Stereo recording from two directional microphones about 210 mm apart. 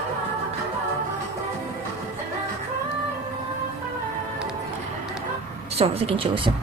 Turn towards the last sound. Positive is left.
turn(degrees=-25)  # may be behind; listen again after turning